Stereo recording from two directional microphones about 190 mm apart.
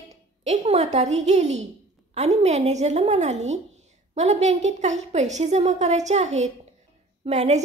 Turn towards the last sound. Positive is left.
turn(degrees=-35)  # may be behind; listen again after turning